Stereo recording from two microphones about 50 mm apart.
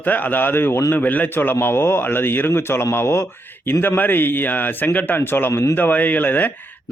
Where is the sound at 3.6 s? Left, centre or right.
Left.